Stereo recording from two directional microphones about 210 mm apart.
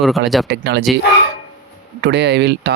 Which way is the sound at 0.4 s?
55° right (ahead or behind).